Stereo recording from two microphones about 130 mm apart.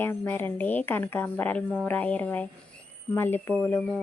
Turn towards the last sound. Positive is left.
turn(degrees=10)  # may be behind; listen again after turning